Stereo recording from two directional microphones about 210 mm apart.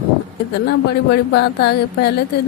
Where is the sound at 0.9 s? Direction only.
55° left (ahead or behind).